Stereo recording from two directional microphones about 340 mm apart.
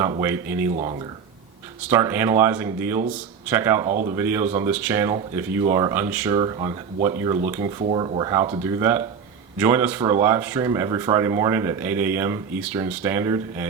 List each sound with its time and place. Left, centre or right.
0.0 s speech: centre
0.7 s speech: right
1.9 s speech: centre